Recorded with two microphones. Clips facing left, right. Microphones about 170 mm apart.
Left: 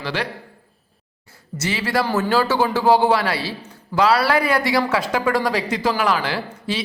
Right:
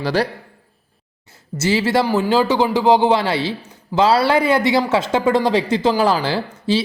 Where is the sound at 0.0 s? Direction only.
40° right (ahead or behind).